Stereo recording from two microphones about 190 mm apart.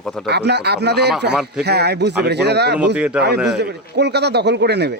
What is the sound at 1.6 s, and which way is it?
Speech, 60° right (ahead or behind).